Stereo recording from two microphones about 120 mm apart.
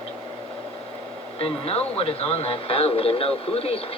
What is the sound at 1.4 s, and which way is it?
Speech, 55° left (ahead or behind).